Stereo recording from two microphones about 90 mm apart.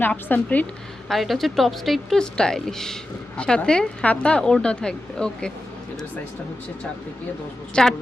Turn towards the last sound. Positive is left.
turn(degrees=10)  # may be behind; listen again after turning